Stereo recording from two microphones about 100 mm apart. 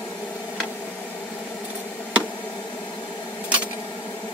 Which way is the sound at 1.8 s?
15° left (ahead or behind).